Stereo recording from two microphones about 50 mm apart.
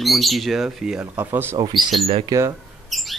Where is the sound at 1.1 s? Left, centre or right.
Right.